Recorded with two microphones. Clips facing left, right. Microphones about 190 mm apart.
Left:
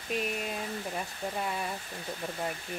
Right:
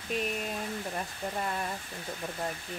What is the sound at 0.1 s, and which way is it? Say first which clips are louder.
Speech: even; centre (ahead or behind).